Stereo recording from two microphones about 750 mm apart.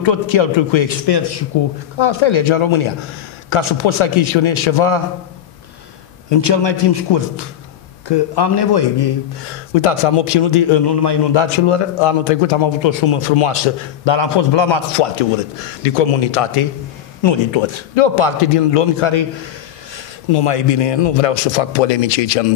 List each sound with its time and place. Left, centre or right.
0.0 s a man's voice: left
6.3 s a man's voice: left
9.8 s a man's voice: left
17.2 s a man's voice: left